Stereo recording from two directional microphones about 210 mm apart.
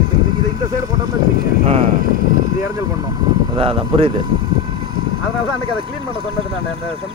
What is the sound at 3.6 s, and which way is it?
Speech, 25° right (ahead or behind).